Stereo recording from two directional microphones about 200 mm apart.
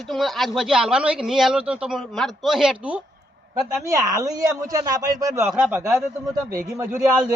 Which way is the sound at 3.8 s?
15° right (ahead or behind).